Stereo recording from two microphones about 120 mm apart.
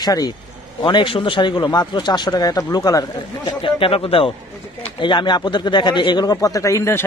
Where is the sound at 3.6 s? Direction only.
50° left (ahead or behind).